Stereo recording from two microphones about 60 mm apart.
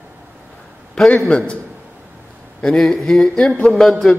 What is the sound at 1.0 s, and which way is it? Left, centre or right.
Speech, centre.